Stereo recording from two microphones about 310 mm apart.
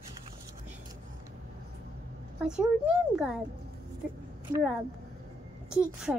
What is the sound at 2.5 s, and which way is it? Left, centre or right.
Speech, centre.